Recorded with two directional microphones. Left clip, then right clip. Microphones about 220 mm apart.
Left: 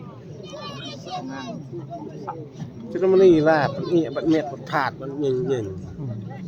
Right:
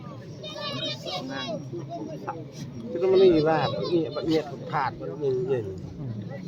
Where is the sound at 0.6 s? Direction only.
25° right (ahead or behind).